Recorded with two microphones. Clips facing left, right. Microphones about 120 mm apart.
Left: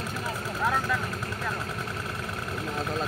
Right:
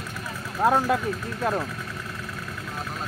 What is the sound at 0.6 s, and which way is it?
Speech, 55° right (ahead or behind).